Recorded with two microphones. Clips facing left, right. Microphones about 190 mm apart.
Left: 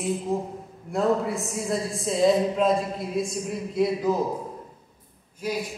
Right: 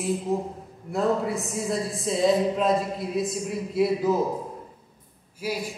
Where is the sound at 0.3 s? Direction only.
Centre (ahead or behind).